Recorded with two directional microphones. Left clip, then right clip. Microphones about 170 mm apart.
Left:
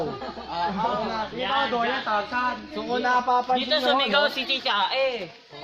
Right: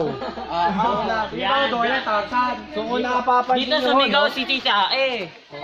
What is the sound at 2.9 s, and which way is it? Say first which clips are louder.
Speech: right 2 dB; 20° left (ahead or behind).